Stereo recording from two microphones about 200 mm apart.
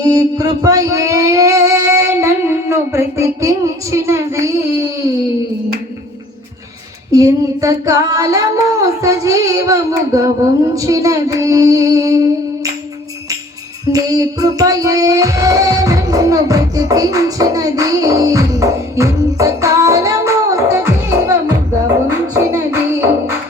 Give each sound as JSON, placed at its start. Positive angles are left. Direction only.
{"t": 0.1, "sound": "a sound", "side_deg": -15}
{"t": 7.1, "sound": "female singing", "side_deg": -15}
{"t": 13.9, "sound": "music", "side_deg": -15}